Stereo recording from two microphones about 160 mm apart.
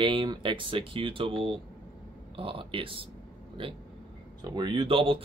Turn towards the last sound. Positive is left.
turn(degrees=-35)  # may be behind; listen again after turning